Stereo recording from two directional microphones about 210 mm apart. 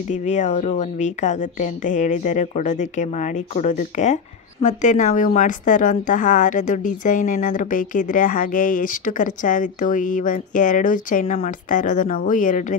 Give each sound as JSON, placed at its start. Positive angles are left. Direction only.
{"t": 0.1, "sound": "speech", "side_deg": 35}